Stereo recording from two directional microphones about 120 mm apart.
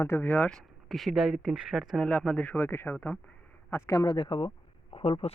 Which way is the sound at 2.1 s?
10° left (ahead or behind).